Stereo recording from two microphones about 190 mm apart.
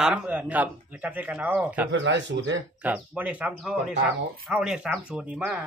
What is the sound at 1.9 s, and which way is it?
Speech, 70° right (ahead or behind).